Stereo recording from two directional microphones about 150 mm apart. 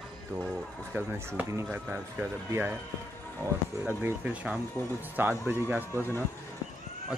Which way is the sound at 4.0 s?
5° right (ahead or behind).